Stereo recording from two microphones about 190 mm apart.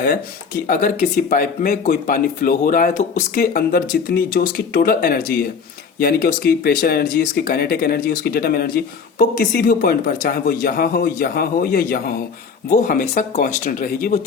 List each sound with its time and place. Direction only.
0.7 s speech: 45° left (ahead or behind)